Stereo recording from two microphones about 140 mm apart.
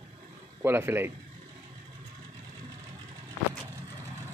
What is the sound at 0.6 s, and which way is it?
Speech, 15° right (ahead or behind).